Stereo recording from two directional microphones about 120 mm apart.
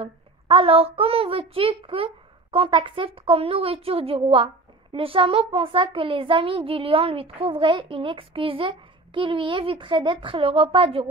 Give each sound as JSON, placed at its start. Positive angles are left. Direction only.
{"t": 0.0, "sound": "a child's voice", "side_deg": -50}